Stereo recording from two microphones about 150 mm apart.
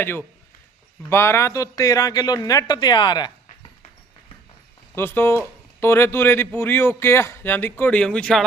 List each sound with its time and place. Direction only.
0.0 s a man's voice: 15° left (ahead or behind)
4.9 s a man's voice: 15° left (ahead or behind)